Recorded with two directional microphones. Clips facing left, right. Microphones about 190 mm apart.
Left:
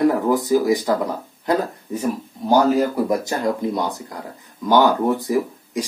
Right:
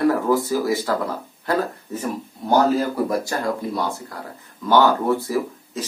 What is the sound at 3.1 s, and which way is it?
Speech, 20° left (ahead or behind).